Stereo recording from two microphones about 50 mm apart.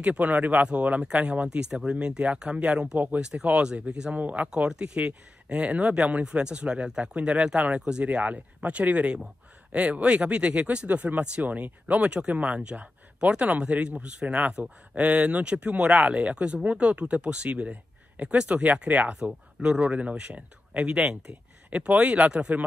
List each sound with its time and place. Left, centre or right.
0.0 s speech: right
18.1 s a sound: right
18.4 s speech: right